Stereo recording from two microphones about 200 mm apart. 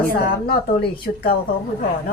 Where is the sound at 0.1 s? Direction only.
50° left (ahead or behind).